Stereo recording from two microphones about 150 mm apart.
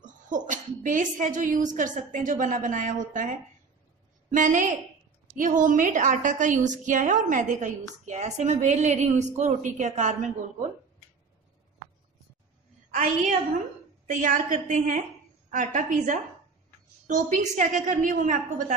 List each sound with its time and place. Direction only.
0.0 s a woman's voice: 60° right (ahead or behind)
14.0 s a woman's voice: 60° right (ahead or behind)